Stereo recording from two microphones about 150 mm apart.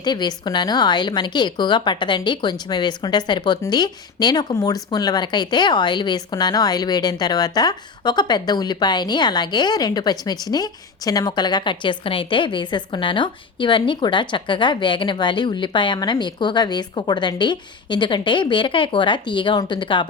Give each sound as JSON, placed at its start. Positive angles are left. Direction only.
{"t": 0.0, "sound": "speech", "side_deg": 30}